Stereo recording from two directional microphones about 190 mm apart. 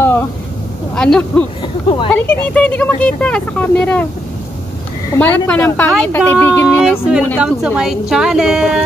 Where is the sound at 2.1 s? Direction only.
5° left (ahead or behind).